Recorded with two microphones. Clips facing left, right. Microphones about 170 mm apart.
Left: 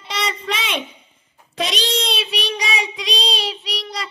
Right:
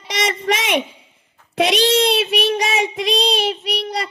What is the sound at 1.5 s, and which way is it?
Child singing, 60° right (ahead or behind).